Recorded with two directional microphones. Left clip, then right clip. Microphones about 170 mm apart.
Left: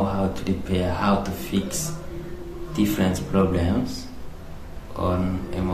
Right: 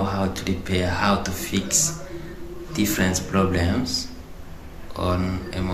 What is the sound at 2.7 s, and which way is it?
Speech, 5° left (ahead or behind).